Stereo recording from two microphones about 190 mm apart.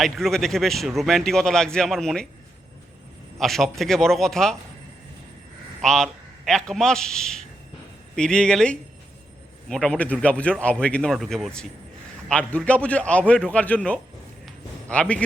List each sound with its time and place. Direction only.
0.0 s speech: centre (ahead or behind)
3.3 s speech: centre (ahead or behind)
5.8 s a man's voice: 5° left (ahead or behind)
14.4 s a sound: 5° left (ahead or behind)